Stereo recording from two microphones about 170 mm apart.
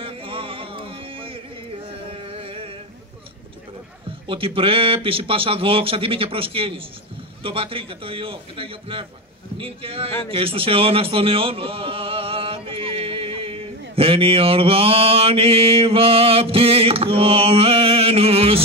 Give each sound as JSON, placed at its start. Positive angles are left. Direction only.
{"t": 0.0, "sound": "music", "side_deg": -30}
{"t": 2.0, "sound": "a sound", "side_deg": -35}
{"t": 4.3, "sound": "a man's voice", "side_deg": -30}